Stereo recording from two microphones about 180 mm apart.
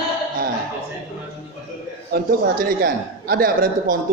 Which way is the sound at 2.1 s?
50° right (ahead or behind).